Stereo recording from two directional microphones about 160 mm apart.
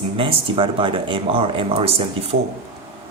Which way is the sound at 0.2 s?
35° right (ahead or behind).